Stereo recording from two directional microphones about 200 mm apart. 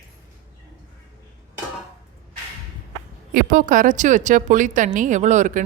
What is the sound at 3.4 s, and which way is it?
Speech, 40° right (ahead or behind).